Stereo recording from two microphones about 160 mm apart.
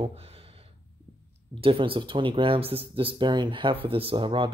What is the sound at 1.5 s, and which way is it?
Speech, 35° right (ahead or behind).